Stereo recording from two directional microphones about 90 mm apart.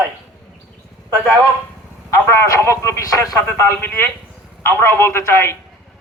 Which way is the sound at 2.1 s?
30° left (ahead or behind).